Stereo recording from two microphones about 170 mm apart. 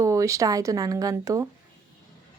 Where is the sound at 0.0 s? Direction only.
20° right (ahead or behind).